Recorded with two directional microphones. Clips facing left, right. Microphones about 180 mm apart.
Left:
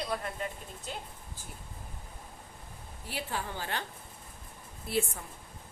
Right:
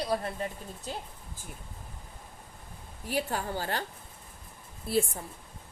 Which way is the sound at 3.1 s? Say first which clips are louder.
Right 6 dB; 40° right (ahead or behind).